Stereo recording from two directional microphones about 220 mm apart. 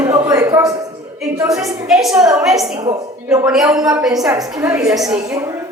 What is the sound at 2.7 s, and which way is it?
Speech, 15° right (ahead or behind).